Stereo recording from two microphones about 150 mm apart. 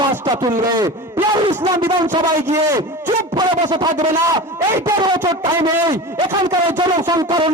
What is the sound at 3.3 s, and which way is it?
A man's voice, 30° right (ahead or behind).